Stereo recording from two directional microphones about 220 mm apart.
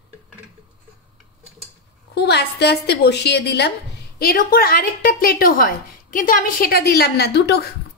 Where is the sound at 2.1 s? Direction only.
50° left (ahead or behind).